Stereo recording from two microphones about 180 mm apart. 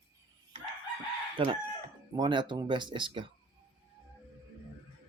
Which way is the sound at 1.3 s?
30° right (ahead or behind).